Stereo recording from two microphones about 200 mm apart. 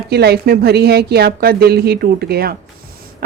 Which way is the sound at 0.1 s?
55° right (ahead or behind).